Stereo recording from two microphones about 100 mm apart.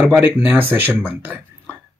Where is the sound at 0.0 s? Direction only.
15° right (ahead or behind).